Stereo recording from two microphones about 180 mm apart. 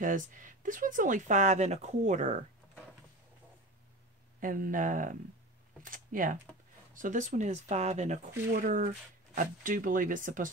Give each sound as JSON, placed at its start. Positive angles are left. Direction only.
{"t": 0.0, "sound": "speech", "side_deg": -45}
{"t": 4.4, "sound": "speech", "side_deg": -50}
{"t": 8.5, "sound": "speech", "side_deg": -50}